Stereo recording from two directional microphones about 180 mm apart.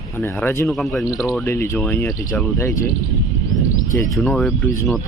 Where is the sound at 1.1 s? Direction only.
20° left (ahead or behind).